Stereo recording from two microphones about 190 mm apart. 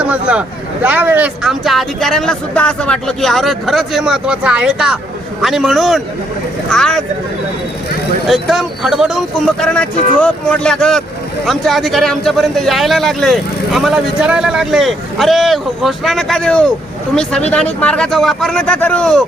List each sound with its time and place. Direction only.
0.0 s a man's voice: 5° right (ahead or behind)
8.3 s a man's voice: centre (ahead or behind)